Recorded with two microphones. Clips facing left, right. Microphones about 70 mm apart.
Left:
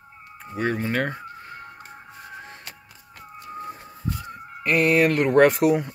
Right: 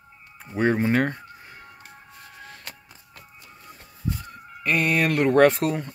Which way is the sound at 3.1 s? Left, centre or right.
Left.